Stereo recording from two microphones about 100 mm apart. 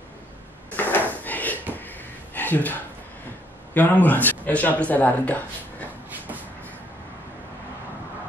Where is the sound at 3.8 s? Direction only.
15° left (ahead or behind).